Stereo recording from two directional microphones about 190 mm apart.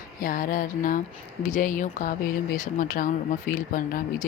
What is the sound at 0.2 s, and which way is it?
Speech, 45° left (ahead or behind).